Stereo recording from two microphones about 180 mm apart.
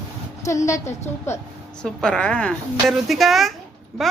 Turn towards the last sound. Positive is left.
turn(degrees=0)  # may be behind; listen again after turning